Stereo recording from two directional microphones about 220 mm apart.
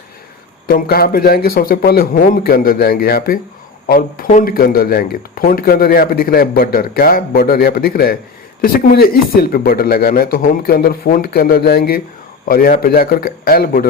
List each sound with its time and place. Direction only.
0.7 s a man's voice: 45° left (ahead or behind)